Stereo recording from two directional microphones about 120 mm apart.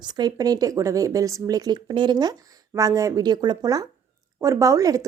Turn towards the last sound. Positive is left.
turn(degrees=-30)  # may be behind; listen again after turning